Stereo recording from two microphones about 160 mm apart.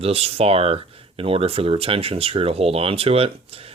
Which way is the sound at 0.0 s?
40° right (ahead or behind).